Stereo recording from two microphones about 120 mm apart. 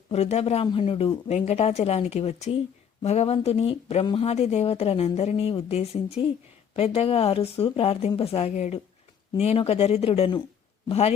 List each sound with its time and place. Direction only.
0.1 s a woman's voice: 60° left (ahead or behind)
1.3 s a woman's voice: 70° left (ahead or behind)
9.4 s a woman's voice: 55° left (ahead or behind)